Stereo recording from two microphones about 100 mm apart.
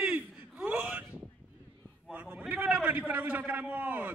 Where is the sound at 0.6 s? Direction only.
15° right (ahead or behind).